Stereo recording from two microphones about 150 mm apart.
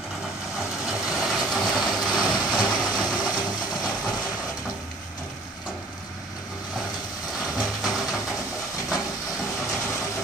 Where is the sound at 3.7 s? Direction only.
5° right (ahead or behind).